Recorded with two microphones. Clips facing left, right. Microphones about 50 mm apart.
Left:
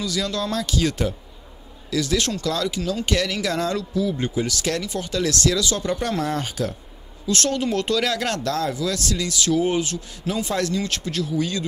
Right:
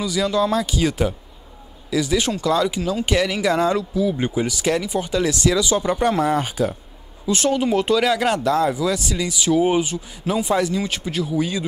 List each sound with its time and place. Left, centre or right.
0.0 s speech: centre